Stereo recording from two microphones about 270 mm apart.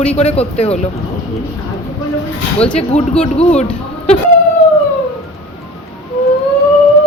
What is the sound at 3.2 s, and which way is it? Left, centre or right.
Speech, left.